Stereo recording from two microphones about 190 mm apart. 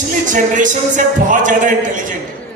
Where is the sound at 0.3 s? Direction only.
40° right (ahead or behind).